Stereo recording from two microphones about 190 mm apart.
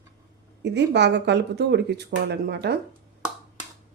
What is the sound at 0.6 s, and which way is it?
Speech, 65° right (ahead or behind).